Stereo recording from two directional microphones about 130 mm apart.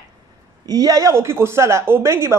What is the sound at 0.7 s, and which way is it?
Speech, 25° right (ahead or behind).